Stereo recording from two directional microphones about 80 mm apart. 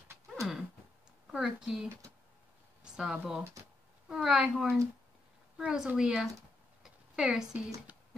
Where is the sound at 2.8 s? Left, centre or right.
Centre.